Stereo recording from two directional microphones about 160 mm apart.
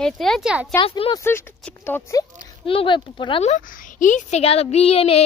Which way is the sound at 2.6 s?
35° left (ahead or behind).